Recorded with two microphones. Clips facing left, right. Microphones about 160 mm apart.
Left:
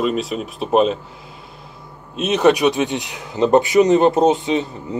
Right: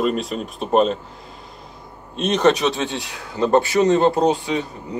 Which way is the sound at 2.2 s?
5° left (ahead or behind).